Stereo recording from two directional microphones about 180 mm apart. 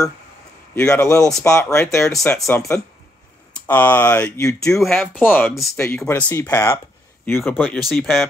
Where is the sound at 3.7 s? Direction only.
10° left (ahead or behind).